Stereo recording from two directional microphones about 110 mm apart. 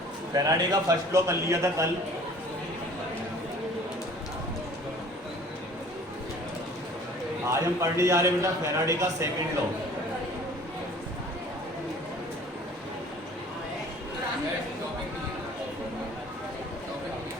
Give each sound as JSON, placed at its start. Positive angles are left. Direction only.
{"t": 0.3, "sound": "a man's voice", "side_deg": -35}
{"t": 7.5, "sound": "a man's voice", "side_deg": -30}